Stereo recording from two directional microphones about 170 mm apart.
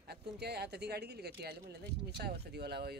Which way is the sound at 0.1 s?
70° right (ahead or behind).